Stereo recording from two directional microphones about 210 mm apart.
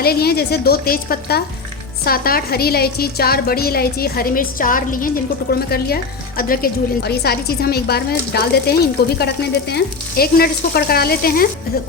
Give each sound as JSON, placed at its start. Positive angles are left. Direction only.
{"t": 0.0, "sound": "a woman's voice", "side_deg": 50}